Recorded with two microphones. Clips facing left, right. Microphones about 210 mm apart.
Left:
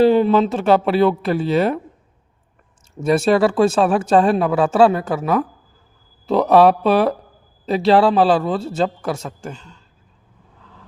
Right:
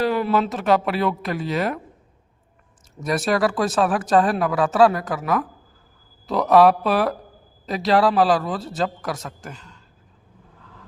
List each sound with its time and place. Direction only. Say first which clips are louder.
0.0 s speech: left 7 dB; 25° left (ahead or behind)
3.0 s speech: left 6 dB; 25° left (ahead or behind)